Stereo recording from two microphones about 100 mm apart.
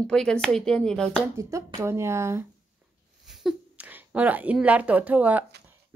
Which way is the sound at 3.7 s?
15° right (ahead or behind).